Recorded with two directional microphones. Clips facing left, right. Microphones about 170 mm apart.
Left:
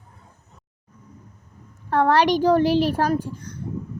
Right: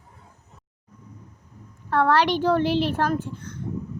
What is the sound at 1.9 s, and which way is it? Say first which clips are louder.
A child's voice: left 2 dB; 15° left (ahead or behind).